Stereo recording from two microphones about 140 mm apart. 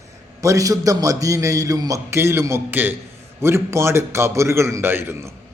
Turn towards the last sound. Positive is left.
turn(degrees=-15)  # may be behind; listen again after turning